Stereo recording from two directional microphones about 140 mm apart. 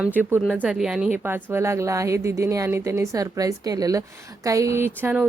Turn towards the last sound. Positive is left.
turn(degrees=-15)  # may be behind; listen again after turning